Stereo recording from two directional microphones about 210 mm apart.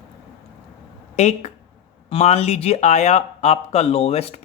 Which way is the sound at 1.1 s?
30° left (ahead or behind).